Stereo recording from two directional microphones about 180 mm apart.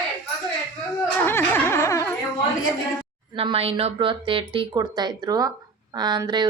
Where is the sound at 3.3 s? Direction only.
30° right (ahead or behind).